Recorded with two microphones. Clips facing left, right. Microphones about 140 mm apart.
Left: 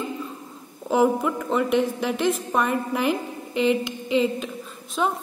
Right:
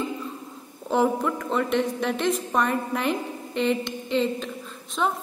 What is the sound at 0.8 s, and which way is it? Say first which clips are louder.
A woman's voice: left 2 dB; 5° left (ahead or behind).